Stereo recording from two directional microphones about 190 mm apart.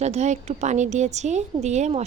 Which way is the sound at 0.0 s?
35° right (ahead or behind).